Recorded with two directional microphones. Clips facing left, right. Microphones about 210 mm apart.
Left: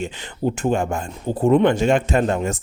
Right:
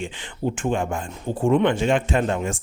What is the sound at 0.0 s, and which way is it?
Speech, 40° left (ahead or behind).